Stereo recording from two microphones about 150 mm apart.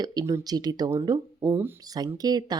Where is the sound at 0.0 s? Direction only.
25° right (ahead or behind).